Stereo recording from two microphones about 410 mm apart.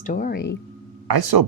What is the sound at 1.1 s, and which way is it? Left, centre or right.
Speech, right.